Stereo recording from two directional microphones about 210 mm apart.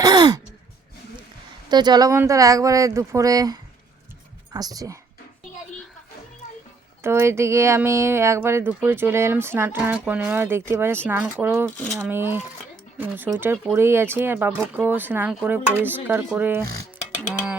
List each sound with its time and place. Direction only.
0.0 s gasp: 20° right (ahead or behind)
1.7 s speech: 20° right (ahead or behind)
7.0 s speech: 10° right (ahead or behind)